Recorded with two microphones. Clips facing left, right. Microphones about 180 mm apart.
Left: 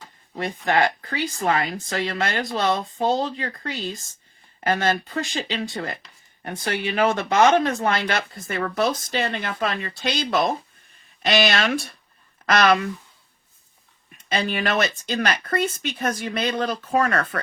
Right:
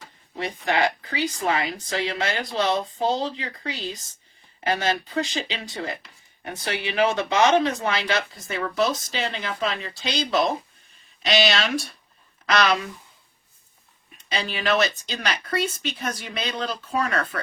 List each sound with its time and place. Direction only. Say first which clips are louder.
0.3 s speech: left 2 dB; 50° left (ahead or behind)
14.3 s speech: left 1 dB; 50° left (ahead or behind)